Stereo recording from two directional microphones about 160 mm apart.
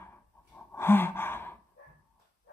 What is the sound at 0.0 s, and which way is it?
Sigh, 15° left (ahead or behind).